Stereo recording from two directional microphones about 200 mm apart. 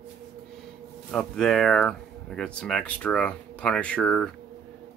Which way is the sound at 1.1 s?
5° left (ahead or behind).